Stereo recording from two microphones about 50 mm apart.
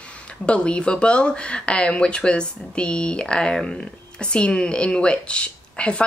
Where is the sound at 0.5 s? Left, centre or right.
Left.